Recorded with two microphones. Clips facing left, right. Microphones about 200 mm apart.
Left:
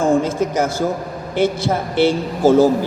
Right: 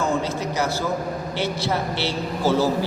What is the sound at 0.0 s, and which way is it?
A man's voice, 50° left (ahead or behind).